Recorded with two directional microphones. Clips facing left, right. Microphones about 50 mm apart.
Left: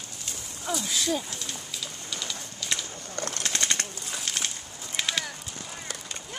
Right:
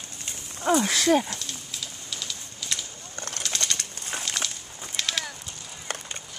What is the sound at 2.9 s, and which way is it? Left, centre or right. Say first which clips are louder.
Bird: left 4 dB; left.